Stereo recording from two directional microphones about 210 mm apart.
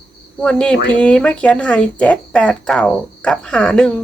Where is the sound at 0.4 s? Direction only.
5° left (ahead or behind).